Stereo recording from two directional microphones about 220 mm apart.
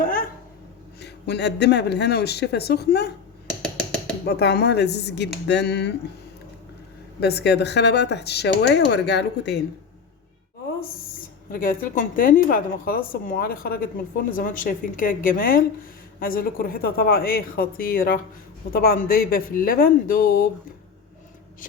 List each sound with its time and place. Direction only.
0.0 s a sound: 40° left (ahead or behind)
0.9 s speech: 50° left (ahead or behind)
3.6 s a sound: 5° left (ahead or behind)
4.3 s speech: 45° left (ahead or behind)
7.2 s speech: 50° left (ahead or behind)
11.5 s a woman's voice: 40° left (ahead or behind)